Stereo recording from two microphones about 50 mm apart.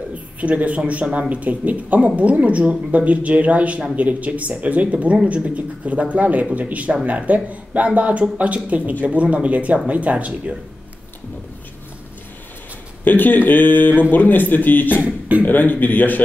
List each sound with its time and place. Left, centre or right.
0.1 s a man's voice: right
13.0 s speech: left
15.0 s a man's voice: right
15.4 s speech: left